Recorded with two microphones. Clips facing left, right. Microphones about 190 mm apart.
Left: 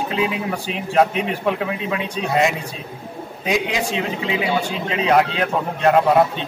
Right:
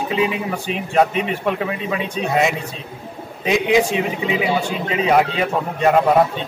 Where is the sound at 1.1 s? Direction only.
55° right (ahead or behind).